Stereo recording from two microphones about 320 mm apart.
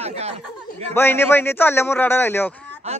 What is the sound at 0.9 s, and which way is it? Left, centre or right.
A man's voice, centre.